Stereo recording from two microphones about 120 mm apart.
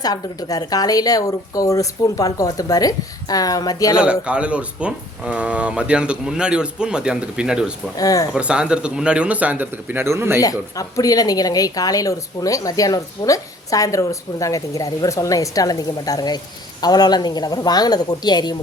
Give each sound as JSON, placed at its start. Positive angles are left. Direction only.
{"t": 0.0, "sound": "a woman's voice", "side_deg": 30}
{"t": 3.9, "sound": "speech", "side_deg": -10}
{"t": 7.9, "sound": "a woman's voice", "side_deg": 30}
{"t": 8.3, "sound": "speech", "side_deg": -10}
{"t": 10.4, "sound": "a woman's voice", "side_deg": 30}